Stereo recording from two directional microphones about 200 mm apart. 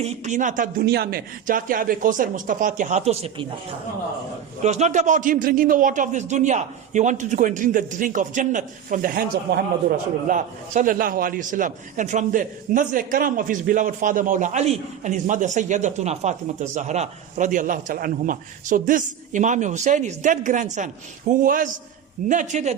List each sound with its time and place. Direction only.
0.0 s a man's voice: 35° right (ahead or behind)
4.6 s a man's voice: 35° right (ahead or behind)